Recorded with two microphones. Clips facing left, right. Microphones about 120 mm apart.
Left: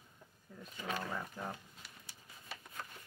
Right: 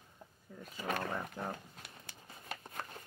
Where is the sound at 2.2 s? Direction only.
40° right (ahead or behind).